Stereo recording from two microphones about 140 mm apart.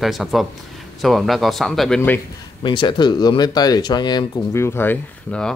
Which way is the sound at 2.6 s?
35° left (ahead or behind).